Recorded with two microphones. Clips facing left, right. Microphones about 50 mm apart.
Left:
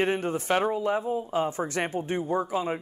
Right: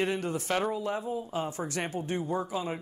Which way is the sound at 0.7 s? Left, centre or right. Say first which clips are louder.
Left 5 dB; left.